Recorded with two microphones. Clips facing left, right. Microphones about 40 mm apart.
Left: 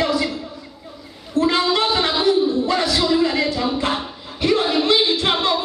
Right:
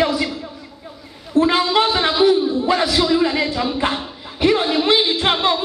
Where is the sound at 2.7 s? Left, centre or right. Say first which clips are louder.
Right 2 dB; centre.